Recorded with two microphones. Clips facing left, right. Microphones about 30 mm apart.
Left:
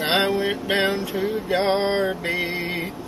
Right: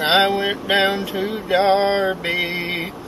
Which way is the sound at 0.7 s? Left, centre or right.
Right.